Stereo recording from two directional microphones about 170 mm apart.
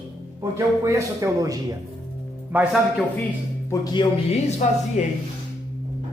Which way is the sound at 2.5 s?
10° right (ahead or behind).